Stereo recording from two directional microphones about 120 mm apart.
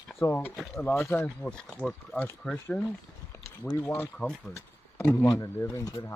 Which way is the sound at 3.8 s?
20° left (ahead or behind).